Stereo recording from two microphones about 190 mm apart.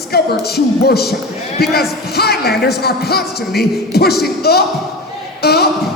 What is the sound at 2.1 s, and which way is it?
Speech, 55° left (ahead or behind).